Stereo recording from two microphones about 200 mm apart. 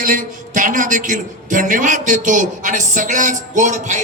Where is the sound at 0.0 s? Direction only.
40° right (ahead or behind).